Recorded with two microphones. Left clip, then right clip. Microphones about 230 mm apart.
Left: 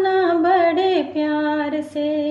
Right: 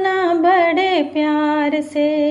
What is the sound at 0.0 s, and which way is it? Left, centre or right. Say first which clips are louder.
Music: right 2 dB; right.